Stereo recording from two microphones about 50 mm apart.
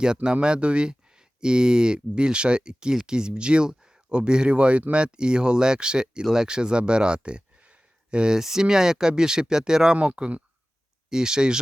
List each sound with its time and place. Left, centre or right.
0.0 s speech: centre